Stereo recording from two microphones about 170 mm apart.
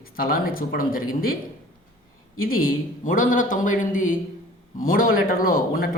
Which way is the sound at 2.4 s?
55° left (ahead or behind).